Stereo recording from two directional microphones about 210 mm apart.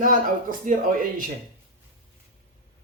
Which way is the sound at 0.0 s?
40° right (ahead or behind).